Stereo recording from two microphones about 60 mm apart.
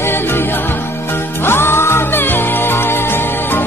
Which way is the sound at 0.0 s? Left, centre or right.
Left.